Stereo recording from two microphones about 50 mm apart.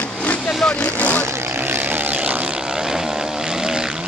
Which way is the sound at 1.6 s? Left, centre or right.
Right.